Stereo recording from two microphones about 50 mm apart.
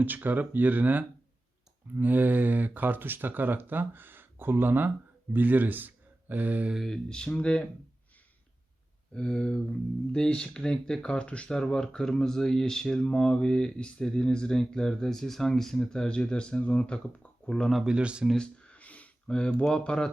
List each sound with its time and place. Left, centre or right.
0.0 s speech: right
6.8 s speech: centre
9.1 s speech: centre
17.8 s speech: centre
18.3 s a sound: left
19.7 s speech: centre